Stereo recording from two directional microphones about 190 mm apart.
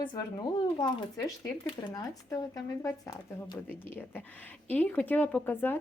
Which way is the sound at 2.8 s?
20° left (ahead or behind).